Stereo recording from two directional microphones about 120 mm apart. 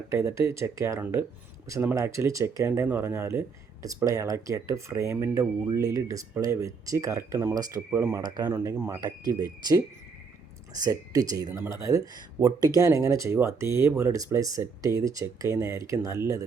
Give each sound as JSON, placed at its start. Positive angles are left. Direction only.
{"t": 0.1, "sound": "speech", "side_deg": -25}
{"t": 9.0, "sound": "speech", "side_deg": -30}